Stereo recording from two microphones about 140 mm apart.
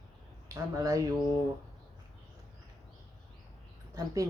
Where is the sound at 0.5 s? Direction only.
25° right (ahead or behind).